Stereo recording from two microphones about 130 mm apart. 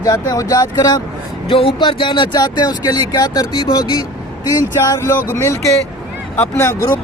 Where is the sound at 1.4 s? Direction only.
45° left (ahead or behind).